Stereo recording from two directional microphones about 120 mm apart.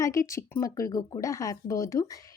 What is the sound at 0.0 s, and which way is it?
Speech, 25° left (ahead or behind).